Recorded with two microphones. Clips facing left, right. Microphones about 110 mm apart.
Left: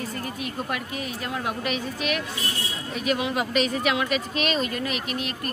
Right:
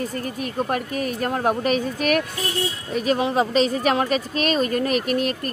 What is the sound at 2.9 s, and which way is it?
Speech, 35° right (ahead or behind).